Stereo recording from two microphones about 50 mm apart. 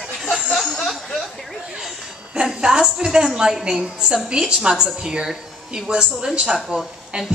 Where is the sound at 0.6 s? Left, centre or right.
Centre.